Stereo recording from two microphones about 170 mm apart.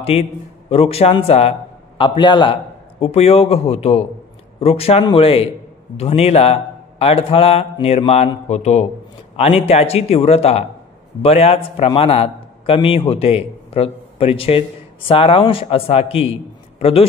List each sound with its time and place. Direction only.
0.0 s a man's voice: 35° left (ahead or behind)